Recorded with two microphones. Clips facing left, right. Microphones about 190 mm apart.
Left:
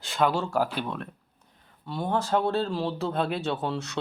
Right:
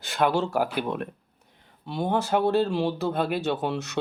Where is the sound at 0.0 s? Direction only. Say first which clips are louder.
Right 1 dB; 5° right (ahead or behind).